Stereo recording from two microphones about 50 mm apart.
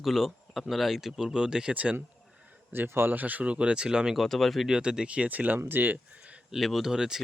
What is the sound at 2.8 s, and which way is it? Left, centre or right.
Speech, right.